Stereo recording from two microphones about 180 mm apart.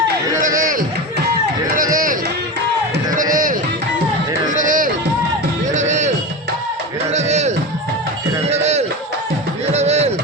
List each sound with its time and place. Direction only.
0.4 s run: 50° right (ahead or behind)
3.2 s music: 50° right (ahead or behind)
4.5 s run: 45° right (ahead or behind)
5.7 s music: 40° right (ahead or behind)
8.4 s a sound: 35° right (ahead or behind)